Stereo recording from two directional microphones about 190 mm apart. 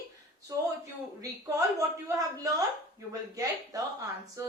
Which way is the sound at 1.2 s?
15° right (ahead or behind).